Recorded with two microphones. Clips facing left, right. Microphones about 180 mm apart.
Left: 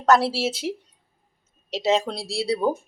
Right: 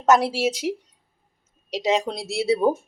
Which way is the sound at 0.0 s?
15° right (ahead or behind).